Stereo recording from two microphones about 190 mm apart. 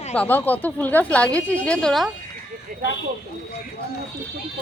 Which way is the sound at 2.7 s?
45° right (ahead or behind).